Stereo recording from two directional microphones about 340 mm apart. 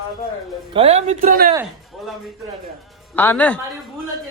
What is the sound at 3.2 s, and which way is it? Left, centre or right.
Speech, centre.